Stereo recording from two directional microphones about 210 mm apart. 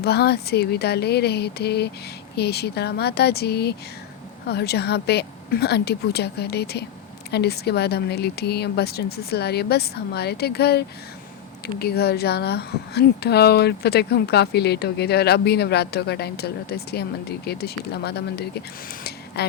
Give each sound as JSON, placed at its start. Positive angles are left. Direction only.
{"t": 0.0, "sound": "a woman's voice", "side_deg": 50}